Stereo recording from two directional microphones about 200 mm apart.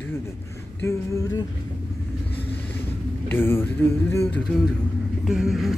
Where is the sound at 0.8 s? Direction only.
15° left (ahead or behind).